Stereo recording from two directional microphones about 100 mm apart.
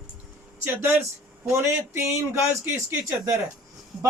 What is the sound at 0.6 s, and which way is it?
Speech, 20° right (ahead or behind).